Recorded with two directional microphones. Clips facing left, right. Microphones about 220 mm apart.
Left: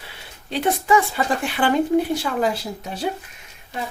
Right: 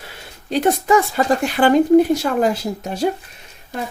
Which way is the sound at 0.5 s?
45° right (ahead or behind).